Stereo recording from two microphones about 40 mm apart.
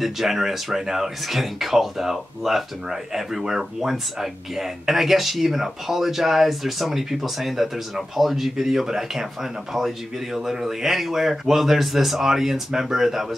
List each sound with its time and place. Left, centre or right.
0.0 s speech: centre